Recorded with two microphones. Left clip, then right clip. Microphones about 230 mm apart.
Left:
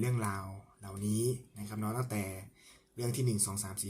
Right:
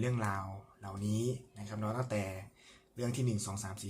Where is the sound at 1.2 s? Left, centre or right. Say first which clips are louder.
Left 5 dB; left.